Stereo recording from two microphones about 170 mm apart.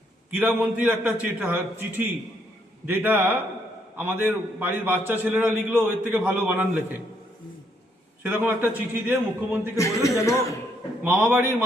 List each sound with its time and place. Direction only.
0.3 s a man's voice: 10° right (ahead or behind)
8.2 s a man's voice: 10° right (ahead or behind)
9.7 s a man's voice: 20° left (ahead or behind)
11.0 s a man's voice: 5° right (ahead or behind)